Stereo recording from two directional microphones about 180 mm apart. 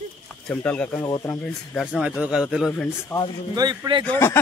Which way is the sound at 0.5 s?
5° left (ahead or behind).